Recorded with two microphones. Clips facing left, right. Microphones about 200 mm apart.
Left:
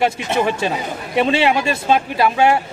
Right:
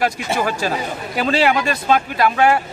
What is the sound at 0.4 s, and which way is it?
Speech, 25° left (ahead or behind).